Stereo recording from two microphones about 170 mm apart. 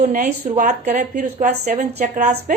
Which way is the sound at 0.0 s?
50° right (ahead or behind).